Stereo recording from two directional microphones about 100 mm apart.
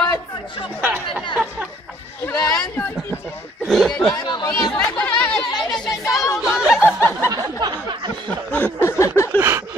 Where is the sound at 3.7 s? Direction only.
5° left (ahead or behind).